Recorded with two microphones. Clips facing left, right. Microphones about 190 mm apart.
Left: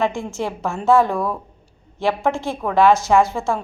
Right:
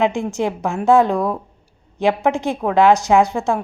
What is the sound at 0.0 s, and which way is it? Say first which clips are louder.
A woman's voice: right 4 dB; 15° right (ahead or behind).